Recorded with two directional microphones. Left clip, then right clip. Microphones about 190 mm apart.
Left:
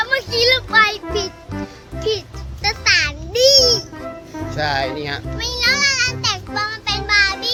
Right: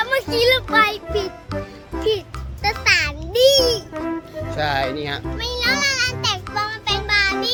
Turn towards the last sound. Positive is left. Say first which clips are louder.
# left 2 dB
turn(degrees=-10)  # may be behind; listen again after turning